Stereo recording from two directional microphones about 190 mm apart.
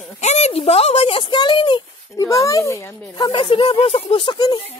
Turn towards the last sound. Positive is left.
turn(degrees=25)  # may be behind; listen again after turning